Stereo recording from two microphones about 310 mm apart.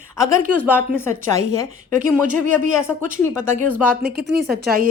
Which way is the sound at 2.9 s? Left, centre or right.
Centre.